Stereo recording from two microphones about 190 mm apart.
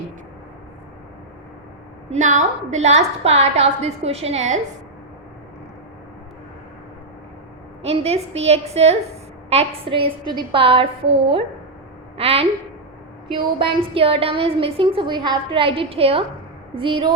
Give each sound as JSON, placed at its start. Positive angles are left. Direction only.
{"t": 2.0, "sound": "a woman's voice", "side_deg": -40}
{"t": 7.9, "sound": "a woman's voice", "side_deg": -35}